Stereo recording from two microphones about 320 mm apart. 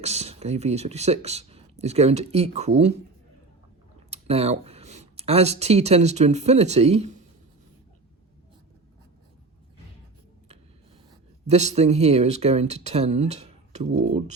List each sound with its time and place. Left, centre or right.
0.0 s speech: centre
4.1 s speech: centre
11.1 s speech: centre